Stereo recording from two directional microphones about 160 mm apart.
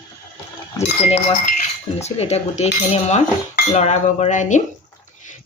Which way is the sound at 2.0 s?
40° left (ahead or behind).